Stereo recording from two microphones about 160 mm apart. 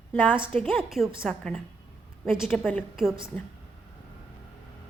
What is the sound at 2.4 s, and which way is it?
Speech, centre (ahead or behind).